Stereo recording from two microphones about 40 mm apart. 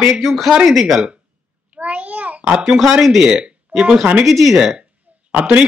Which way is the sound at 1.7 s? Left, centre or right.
Right.